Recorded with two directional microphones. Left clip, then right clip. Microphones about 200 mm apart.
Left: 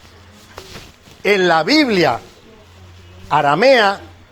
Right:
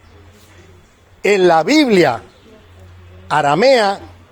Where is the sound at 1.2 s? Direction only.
50° right (ahead or behind).